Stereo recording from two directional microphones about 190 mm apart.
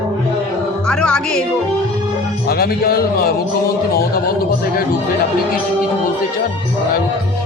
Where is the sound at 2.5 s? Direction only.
55° left (ahead or behind).